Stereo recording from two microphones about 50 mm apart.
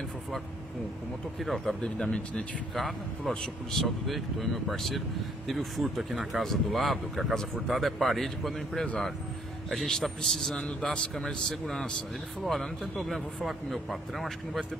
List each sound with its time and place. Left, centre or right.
1.4 s speech: centre
1.8 s a man's voice: centre
2.7 s speech: centre
9.8 s a man's voice: centre
13.1 s speech: centre